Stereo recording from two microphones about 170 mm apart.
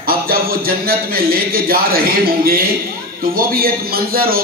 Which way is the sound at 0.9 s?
60° right (ahead or behind).